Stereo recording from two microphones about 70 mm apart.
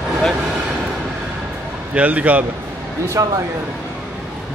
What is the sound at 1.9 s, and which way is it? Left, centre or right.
Speech, centre.